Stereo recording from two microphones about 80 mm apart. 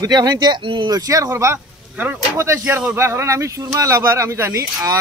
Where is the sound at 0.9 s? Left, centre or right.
Right.